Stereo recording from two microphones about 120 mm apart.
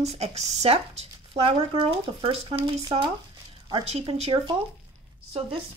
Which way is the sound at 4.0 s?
45° right (ahead or behind).